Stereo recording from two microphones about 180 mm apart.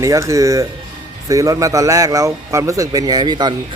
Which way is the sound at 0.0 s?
15° right (ahead or behind).